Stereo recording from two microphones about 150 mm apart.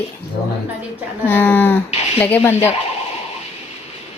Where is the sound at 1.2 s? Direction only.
15° left (ahead or behind).